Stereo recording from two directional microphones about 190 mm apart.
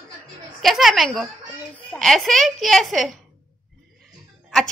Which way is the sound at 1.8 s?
Centre (ahead or behind).